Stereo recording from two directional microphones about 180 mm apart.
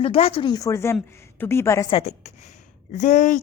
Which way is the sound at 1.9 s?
35° left (ahead or behind).